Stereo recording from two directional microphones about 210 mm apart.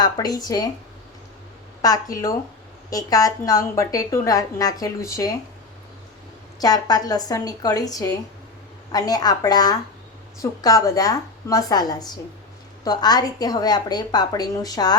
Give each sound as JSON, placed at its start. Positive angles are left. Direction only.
{"t": 0.0, "sound": "a woman's voice", "side_deg": 20}
{"t": 1.8, "sound": "a woman's voice", "side_deg": 15}
{"t": 6.6, "sound": "a woman's voice", "side_deg": 20}